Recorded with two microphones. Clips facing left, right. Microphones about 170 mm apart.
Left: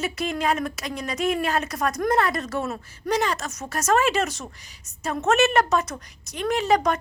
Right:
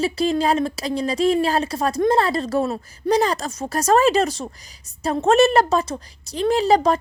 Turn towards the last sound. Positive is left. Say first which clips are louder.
# right 4 dB
turn(degrees=-30)  # may be behind; listen again after turning